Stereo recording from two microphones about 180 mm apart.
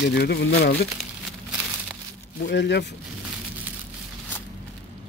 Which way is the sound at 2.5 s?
75° left (ahead or behind).